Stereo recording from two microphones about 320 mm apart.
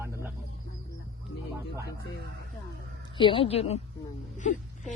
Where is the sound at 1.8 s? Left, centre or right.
Left.